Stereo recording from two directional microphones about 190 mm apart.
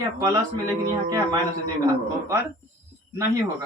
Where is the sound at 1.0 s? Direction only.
20° right (ahead or behind).